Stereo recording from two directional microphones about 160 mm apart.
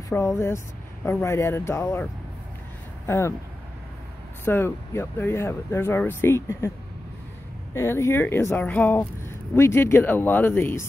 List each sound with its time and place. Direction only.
0.1 s speech: 15° left (ahead or behind)
3.1 s speech: 15° left (ahead or behind)
4.5 s speech: 15° left (ahead or behind)
7.7 s speech: 15° left (ahead or behind)